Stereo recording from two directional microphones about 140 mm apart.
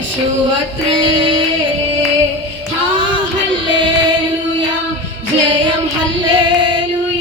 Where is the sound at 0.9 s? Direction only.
35° right (ahead or behind).